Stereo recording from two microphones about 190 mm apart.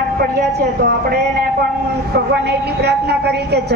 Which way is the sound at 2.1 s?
60° right (ahead or behind).